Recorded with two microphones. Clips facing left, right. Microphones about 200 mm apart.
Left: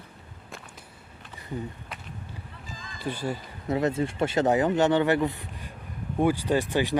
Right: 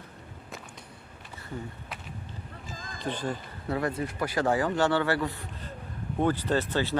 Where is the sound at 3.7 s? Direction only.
20° left (ahead or behind).